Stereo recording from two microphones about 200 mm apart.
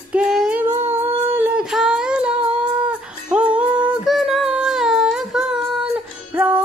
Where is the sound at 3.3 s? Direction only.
5° right (ahead or behind).